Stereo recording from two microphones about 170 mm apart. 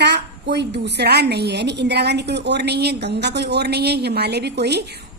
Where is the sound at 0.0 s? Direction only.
85° right.